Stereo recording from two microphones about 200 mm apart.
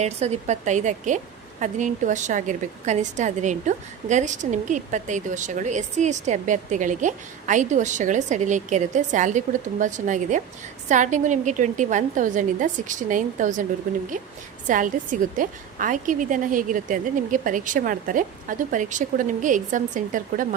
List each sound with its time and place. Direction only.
0.0 s a woman's voice: 35° right (ahead or behind)